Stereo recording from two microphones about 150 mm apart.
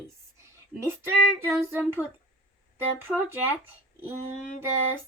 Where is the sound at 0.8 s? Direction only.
15° right (ahead or behind).